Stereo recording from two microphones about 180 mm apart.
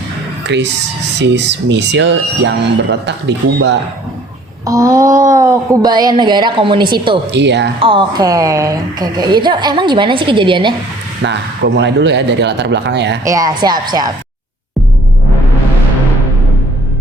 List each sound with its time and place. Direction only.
0.4 s speech: 75° right (ahead or behind)
4.6 s a woman's voice: 20° right (ahead or behind)
7.3 s speech: 75° right (ahead or behind)
7.8 s a woman's voice: 30° right (ahead or behind)
11.2 s speech: 70° right (ahead or behind)
13.2 s a woman's voice: 20° right (ahead or behind)